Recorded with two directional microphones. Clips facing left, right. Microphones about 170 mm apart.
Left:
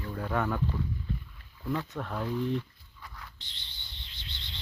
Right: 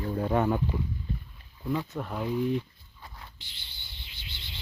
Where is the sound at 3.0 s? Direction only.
25° right (ahead or behind).